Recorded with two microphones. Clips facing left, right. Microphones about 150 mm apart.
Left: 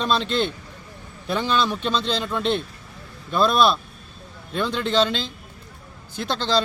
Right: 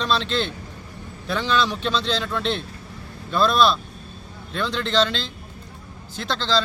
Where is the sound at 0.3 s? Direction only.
50° left (ahead or behind).